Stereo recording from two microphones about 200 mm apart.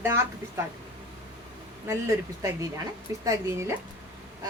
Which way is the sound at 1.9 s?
15° right (ahead or behind).